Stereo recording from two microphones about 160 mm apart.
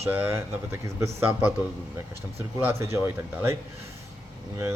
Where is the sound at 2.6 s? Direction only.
15° right (ahead or behind).